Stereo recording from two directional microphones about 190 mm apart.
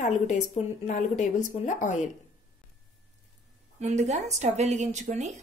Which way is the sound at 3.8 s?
35° right (ahead or behind).